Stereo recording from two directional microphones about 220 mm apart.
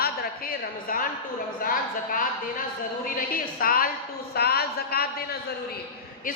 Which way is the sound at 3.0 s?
40° left (ahead or behind).